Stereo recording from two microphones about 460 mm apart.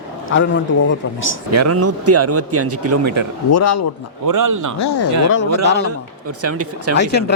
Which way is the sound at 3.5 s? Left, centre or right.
Left.